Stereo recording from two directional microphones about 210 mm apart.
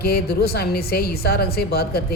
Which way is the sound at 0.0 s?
45° left (ahead or behind).